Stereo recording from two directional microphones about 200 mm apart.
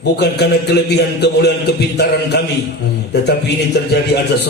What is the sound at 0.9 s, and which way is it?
A man's voice, 55° left (ahead or behind).